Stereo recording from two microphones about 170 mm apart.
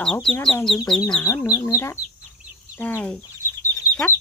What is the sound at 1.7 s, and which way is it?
Speech, 15° left (ahead or behind).